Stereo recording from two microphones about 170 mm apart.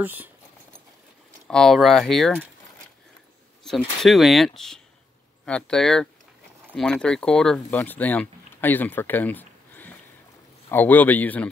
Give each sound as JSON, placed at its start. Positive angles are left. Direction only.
{"t": 0.0, "sound": "speech", "side_deg": -10}
{"t": 1.5, "sound": "speech", "side_deg": 0}
{"t": 3.6, "sound": "speech", "side_deg": 0}